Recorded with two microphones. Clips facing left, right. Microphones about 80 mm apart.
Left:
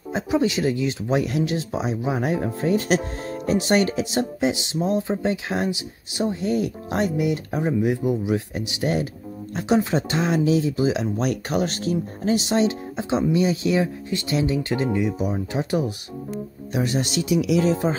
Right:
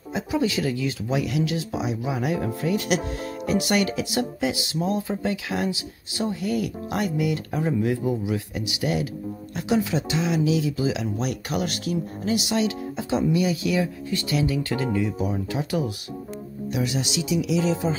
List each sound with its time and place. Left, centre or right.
0.1 s speech: left
8.5 s speech: left
15.5 s speech: left
16.7 s speech: left